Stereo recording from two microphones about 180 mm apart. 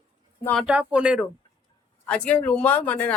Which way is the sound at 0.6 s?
5° right (ahead or behind).